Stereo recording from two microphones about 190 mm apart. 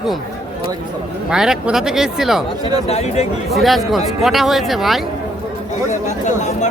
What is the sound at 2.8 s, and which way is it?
Speech, 35° left (ahead or behind).